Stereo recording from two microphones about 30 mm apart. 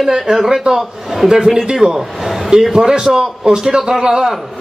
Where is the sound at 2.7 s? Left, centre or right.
Right.